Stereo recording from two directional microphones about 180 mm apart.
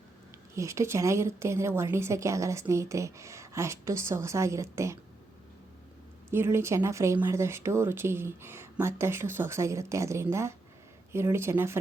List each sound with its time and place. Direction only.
0.5 s a woman's voice: 15° right (ahead or behind)
6.3 s a woman's voice: 15° right (ahead or behind)